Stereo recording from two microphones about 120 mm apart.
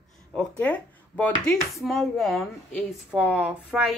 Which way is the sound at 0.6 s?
10° left (ahead or behind).